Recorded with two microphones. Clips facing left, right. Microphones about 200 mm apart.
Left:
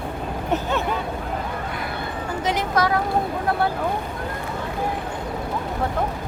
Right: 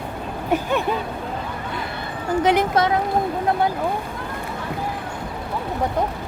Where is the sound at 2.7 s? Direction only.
25° right (ahead or behind).